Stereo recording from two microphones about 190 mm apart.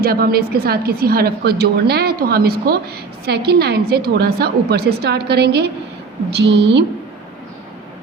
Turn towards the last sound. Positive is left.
turn(degrees=-65)  # may be behind; listen again after turning